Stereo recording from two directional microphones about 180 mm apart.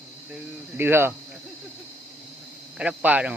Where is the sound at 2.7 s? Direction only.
5° right (ahead or behind).